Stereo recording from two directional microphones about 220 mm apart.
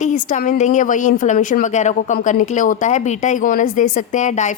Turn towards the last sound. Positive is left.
turn(degrees=35)  # may be behind; listen again after turning